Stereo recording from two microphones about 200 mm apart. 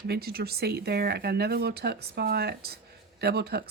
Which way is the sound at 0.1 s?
50° right (ahead or behind).